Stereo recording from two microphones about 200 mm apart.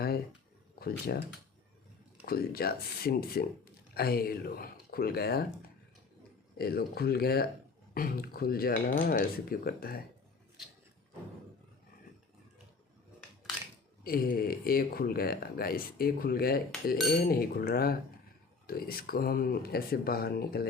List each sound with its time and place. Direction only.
0.8 s speech: 50° left (ahead or behind)
2.2 s speech: 50° left (ahead or behind)
6.6 s speech: 50° left (ahead or behind)
14.0 s speech: 45° left (ahead or behind)